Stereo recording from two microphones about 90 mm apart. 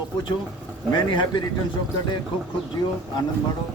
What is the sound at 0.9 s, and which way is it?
Speech, 60° left (ahead or behind).